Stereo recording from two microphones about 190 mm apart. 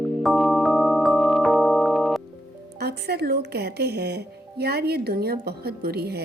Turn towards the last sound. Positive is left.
turn(degrees=-55)  # may be behind; listen again after turning